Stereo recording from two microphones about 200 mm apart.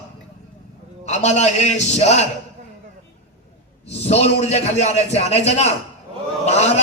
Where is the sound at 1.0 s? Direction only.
35° left (ahead or behind).